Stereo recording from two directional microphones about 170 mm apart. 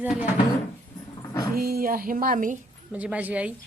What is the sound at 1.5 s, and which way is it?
A woman's voice, 60° right (ahead or behind).